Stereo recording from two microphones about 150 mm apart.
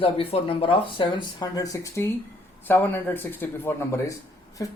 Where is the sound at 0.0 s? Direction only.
35° left (ahead or behind).